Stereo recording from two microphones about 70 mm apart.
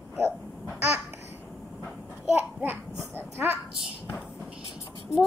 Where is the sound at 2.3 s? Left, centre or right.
Right.